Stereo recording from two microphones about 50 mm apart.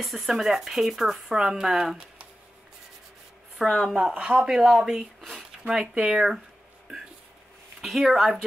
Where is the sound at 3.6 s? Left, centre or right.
Centre.